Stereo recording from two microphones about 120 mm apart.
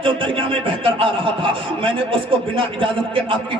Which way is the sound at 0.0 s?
45° right (ahead or behind).